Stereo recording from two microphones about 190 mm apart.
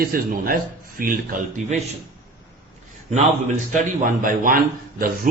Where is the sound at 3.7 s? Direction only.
45° right (ahead or behind).